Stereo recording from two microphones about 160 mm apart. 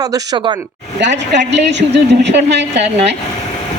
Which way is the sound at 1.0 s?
90° right.